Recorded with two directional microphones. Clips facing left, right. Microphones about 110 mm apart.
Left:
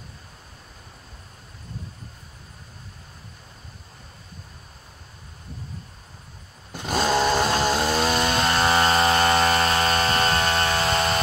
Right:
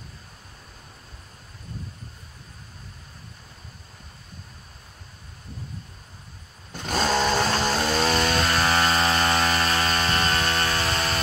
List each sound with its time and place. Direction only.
6.7 s chainsaw: 10° left (ahead or behind)